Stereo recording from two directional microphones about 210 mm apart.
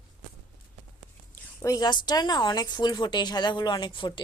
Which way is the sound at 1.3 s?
15° left (ahead or behind).